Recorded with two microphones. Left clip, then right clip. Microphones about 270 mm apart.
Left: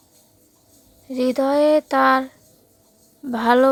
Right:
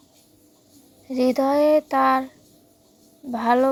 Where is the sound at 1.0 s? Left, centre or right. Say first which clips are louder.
Even; centre.